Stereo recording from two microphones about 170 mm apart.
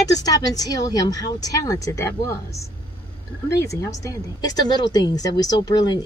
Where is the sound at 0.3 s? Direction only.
20° left (ahead or behind).